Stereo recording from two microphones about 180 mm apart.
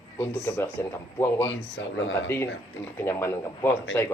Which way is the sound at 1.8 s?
90° left.